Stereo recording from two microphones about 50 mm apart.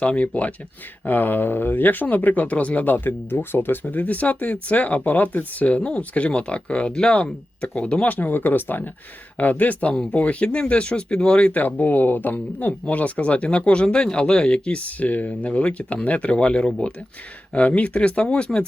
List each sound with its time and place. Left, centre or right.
0.0 s speech: left
3.8 s speech: left
8.1 s speech: left
9.9 s speech: centre
11.6 s speech: left